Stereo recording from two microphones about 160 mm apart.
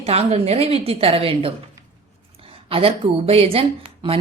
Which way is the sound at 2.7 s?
35° right (ahead or behind).